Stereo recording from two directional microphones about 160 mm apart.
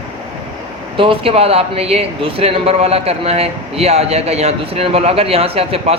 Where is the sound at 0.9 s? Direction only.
35° right (ahead or behind).